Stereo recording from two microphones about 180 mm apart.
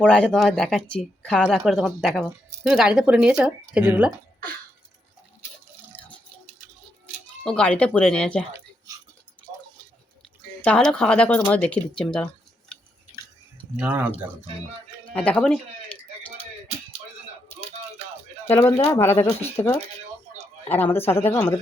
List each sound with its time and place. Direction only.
0.0 s speech: 5° left (ahead or behind)
7.4 s speech: 5° left (ahead or behind)
10.6 s speech: 5° left (ahead or behind)
13.7 s speech: 10° right (ahead or behind)
15.1 s speech: 5° left (ahead or behind)
15.9 s a sound: 10° left (ahead or behind)
18.5 s speech: 15° left (ahead or behind)
20.7 s speech: 10° left (ahead or behind)